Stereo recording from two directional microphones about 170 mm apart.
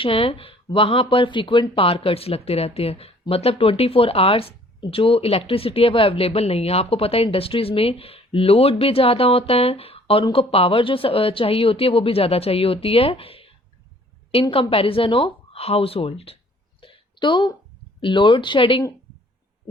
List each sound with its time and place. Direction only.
0.0 s speech: 30° left (ahead or behind)
16.8 s a sound: 30° left (ahead or behind)
18.0 s speech: 30° left (ahead or behind)